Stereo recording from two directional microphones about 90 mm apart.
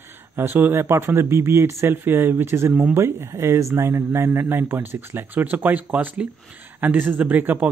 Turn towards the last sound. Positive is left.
turn(degrees=-20)  # may be behind; listen again after turning